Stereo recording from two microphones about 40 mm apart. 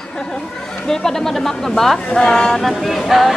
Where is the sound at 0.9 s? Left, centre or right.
Centre.